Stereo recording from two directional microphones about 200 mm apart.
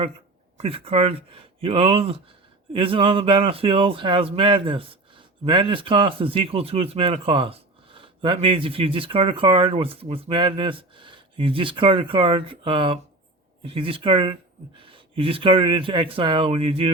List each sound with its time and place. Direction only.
0.5 s speech: 30° right (ahead or behind)